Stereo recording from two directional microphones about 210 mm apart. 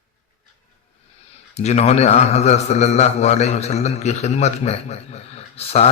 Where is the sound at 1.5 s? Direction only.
30° left (ahead or behind).